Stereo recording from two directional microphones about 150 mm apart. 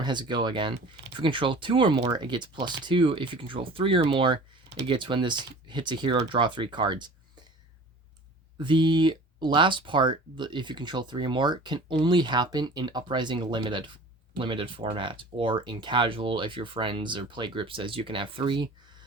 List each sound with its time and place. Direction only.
0.0 s speech: 30° right (ahead or behind)
8.5 s speech: 30° right (ahead or behind)